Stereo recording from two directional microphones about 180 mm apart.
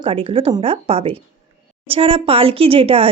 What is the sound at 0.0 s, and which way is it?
Speech, 30° right (ahead or behind).